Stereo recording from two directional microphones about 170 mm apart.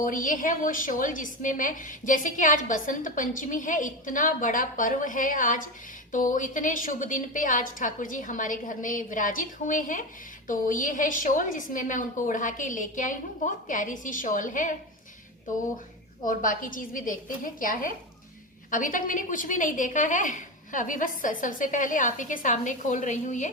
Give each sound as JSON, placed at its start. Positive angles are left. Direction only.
{"t": 0.0, "sound": "a woman's voice", "side_deg": 50}
{"t": 16.2, "sound": "a woman's voice", "side_deg": 50}